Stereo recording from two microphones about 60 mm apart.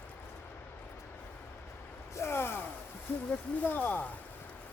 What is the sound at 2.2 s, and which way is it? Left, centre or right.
Gasp, left.